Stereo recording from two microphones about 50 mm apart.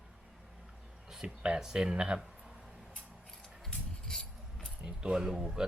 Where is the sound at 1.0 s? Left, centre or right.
Centre.